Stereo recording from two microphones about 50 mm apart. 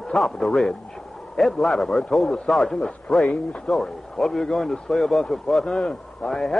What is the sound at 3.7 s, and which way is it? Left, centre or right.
Speech, centre.